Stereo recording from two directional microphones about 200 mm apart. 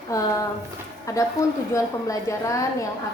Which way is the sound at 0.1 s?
15° left (ahead or behind).